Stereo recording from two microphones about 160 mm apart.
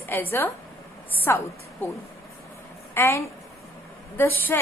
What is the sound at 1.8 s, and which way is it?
A woman's voice, 15° left (ahead or behind).